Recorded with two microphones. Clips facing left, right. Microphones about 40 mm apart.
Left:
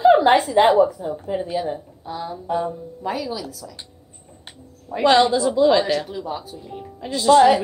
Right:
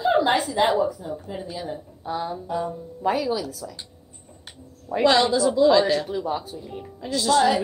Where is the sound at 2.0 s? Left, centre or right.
Centre.